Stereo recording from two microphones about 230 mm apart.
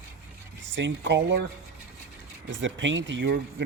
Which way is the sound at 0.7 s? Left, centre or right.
Right.